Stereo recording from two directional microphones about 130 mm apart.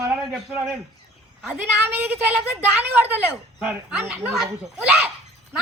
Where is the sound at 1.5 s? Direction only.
10° right (ahead or behind).